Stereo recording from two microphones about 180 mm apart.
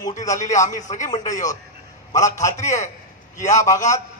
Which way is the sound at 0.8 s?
40° left (ahead or behind).